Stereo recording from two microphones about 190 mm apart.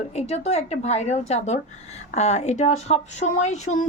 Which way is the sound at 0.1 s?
35° left (ahead or behind).